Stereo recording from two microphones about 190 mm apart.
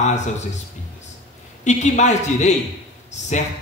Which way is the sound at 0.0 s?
40° left (ahead or behind).